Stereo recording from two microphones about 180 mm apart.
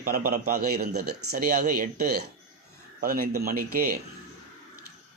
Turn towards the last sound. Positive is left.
turn(degrees=-55)  # may be behind; listen again after turning